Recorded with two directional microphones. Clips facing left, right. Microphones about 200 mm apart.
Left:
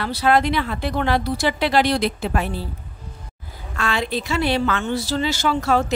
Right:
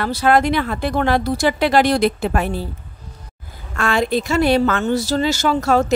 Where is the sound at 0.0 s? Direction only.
45° right (ahead or behind).